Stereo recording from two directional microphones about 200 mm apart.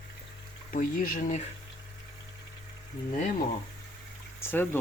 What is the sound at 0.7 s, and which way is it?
Speech, 40° left (ahead or behind).